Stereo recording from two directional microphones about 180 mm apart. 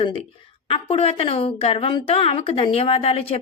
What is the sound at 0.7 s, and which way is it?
A woman's voice, 35° left (ahead or behind).